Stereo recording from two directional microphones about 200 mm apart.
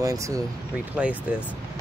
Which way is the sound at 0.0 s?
15° right (ahead or behind).